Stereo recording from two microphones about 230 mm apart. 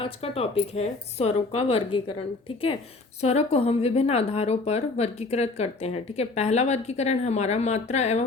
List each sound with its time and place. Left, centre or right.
0.0 s speech: left
3.2 s speech: left